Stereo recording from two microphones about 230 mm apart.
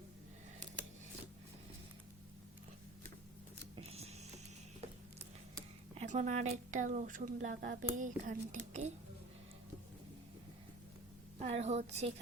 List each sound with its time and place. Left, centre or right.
3.8 s power windows: right
5.9 s speech: right
11.3 s a woman's voice: right